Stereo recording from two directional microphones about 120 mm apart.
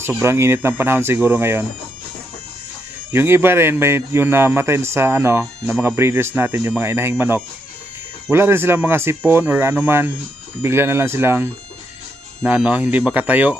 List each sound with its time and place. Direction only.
0.2 s speech: 20° right (ahead or behind)
3.1 s speech: 20° right (ahead or behind)
12.5 s speech: 10° right (ahead or behind)